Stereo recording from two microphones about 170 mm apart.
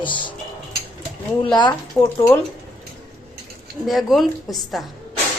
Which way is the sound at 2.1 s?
15° left (ahead or behind).